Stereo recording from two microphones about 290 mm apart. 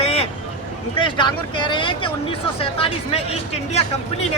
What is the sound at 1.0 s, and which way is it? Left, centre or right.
Speech, centre.